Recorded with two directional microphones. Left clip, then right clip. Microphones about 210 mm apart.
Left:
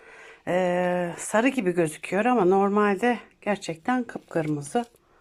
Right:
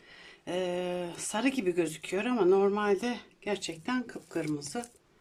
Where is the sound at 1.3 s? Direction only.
10° left (ahead or behind).